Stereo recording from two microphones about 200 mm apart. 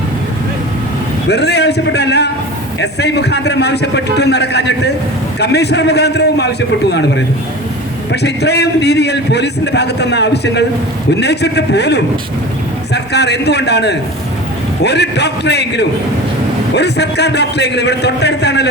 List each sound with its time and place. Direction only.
1.3 s a man's voice: 55° left (ahead or behind)
8.1 s a man's voice: 55° left (ahead or behind)